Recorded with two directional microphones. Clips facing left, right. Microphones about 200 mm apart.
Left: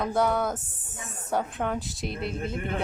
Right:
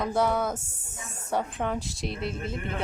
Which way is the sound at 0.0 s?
Centre (ahead or behind).